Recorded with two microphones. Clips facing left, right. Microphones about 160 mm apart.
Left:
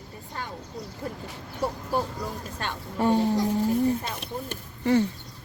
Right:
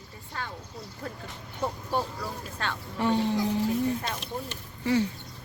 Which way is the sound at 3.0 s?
45° left (ahead or behind).